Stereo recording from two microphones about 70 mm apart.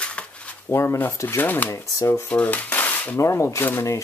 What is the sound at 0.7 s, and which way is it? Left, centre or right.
Speech, left.